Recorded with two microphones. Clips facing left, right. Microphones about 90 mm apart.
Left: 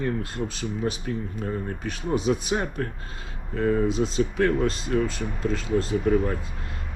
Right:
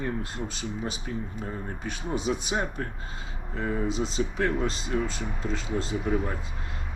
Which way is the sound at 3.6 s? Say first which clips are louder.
Left 6 dB; 50° left (ahead or behind).